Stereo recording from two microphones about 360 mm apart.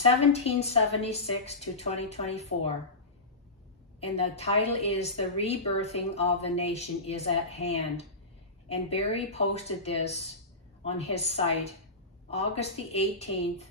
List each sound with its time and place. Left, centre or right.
0.3 s a woman's voice: centre
4.0 s a woman's voice: centre